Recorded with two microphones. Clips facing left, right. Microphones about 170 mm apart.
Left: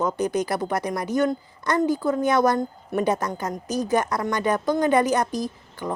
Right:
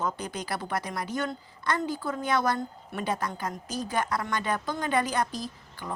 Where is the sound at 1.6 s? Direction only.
20° left (ahead or behind).